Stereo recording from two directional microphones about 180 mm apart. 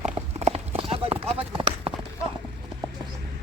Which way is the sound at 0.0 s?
35° right (ahead or behind).